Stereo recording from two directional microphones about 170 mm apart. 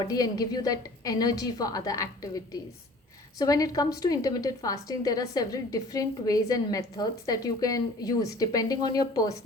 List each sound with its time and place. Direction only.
0.0 s a woman's voice: 20° left (ahead or behind)